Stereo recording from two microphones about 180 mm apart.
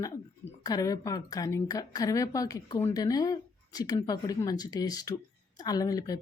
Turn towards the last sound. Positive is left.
turn(degrees=20)  # may be behind; listen again after turning